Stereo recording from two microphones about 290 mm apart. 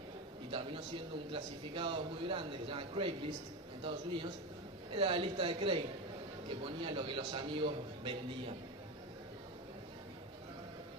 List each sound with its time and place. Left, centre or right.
0.5 s a man's voice: centre